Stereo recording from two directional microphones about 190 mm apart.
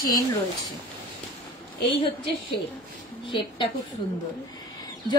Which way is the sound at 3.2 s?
25° left (ahead or behind).